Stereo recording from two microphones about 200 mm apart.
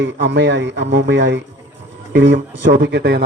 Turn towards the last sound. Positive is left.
turn(degrees=-60)  # may be behind; listen again after turning